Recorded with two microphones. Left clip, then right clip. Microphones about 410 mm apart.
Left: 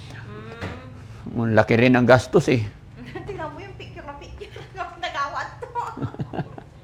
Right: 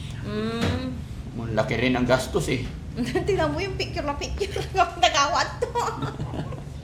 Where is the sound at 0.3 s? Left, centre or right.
Right.